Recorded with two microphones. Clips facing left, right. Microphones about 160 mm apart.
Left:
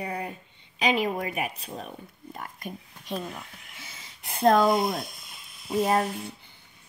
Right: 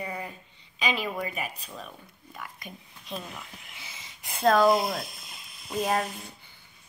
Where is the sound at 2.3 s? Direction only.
50° left (ahead or behind).